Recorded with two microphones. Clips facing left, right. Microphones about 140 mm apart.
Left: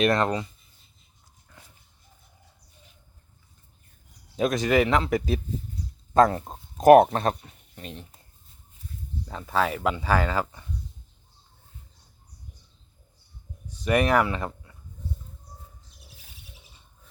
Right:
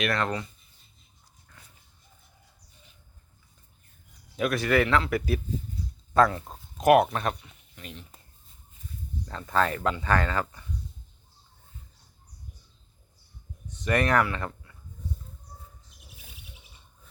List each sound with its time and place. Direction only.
0.0 s speech: 20° left (ahead or behind)
4.4 s speech: 20° left (ahead or behind)
6.7 s speech: 40° left (ahead or behind)
9.2 s speech: 10° left (ahead or behind)
13.7 s speech: 10° left (ahead or behind)